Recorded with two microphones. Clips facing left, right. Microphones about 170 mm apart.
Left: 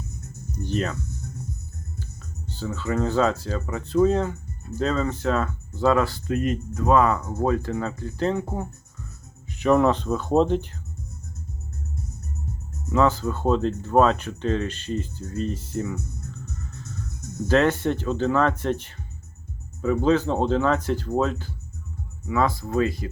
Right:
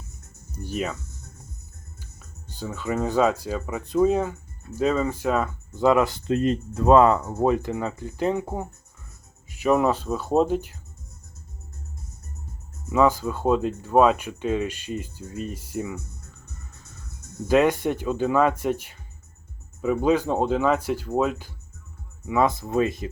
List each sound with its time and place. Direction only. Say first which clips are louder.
0.5 s speech: left 2 dB; 10° right (ahead or behind)
2.5 s speech: left 1 dB; 15° right (ahead or behind)
12.9 s speech: right 1 dB; 10° right (ahead or behind)
17.5 s speech: right 1 dB; 15° right (ahead or behind)